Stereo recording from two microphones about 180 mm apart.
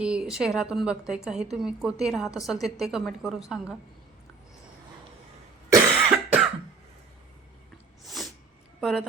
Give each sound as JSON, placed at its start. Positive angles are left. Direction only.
{"t": 0.0, "sound": "a woman's voice", "side_deg": -5}
{"t": 5.7, "sound": "cough", "side_deg": -15}
{"t": 8.0, "sound": "sneeze", "side_deg": 0}
{"t": 8.8, "sound": "a woman's voice", "side_deg": 0}